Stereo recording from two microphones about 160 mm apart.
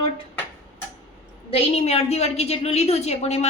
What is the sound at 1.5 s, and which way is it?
A woman's voice, 40° left (ahead or behind).